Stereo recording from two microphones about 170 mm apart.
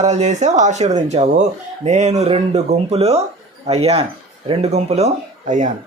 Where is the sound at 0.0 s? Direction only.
40° right (ahead or behind).